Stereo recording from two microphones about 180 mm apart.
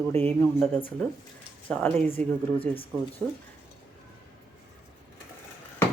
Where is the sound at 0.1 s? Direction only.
10° left (ahead or behind).